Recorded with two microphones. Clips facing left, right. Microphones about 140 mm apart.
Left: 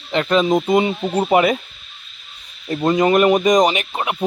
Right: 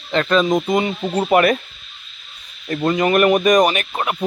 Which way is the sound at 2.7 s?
20° left (ahead or behind).